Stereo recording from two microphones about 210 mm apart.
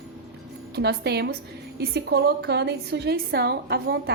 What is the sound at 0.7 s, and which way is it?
A woman's voice, 50° right (ahead or behind).